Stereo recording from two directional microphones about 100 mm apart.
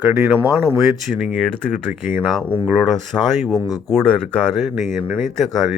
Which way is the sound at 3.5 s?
40° left (ahead or behind).